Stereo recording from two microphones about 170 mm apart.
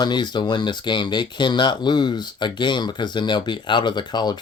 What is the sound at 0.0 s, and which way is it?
Speech, 25° left (ahead or behind).